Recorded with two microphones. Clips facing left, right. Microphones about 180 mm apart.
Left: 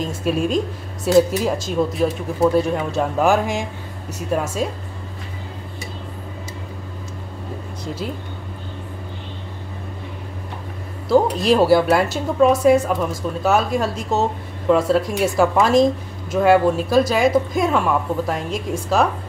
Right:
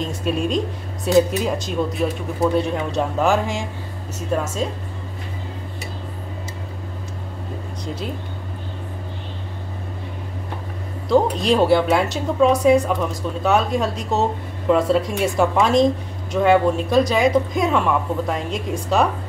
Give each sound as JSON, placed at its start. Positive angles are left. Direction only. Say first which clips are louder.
{"t": 0.0, "sound": "a woman's voice", "louder": "left 2 dB", "side_deg": 5}
{"t": 11.1, "sound": "a woman's voice", "louder": "left 1 dB", "side_deg": 5}